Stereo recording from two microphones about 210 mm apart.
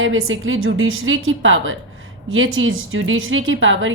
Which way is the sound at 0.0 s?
70° right (ahead or behind).